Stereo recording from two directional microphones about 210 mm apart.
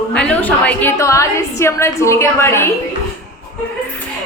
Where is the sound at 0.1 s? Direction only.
5° left (ahead or behind).